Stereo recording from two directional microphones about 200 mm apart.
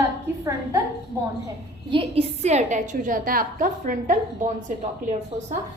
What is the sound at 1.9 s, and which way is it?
A woman's voice, 30° right (ahead or behind).